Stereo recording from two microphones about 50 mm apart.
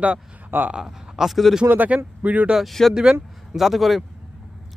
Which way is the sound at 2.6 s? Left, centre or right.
Centre.